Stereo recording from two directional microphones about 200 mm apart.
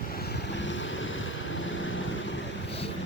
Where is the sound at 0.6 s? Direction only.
65° left (ahead or behind).